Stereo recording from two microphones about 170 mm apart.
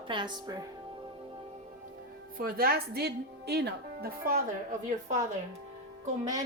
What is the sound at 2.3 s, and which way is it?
A woman's voice, 60° right (ahead or behind).